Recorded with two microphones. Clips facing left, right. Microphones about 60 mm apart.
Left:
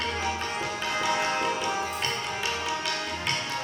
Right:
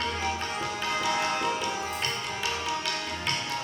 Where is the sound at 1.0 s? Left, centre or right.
Centre.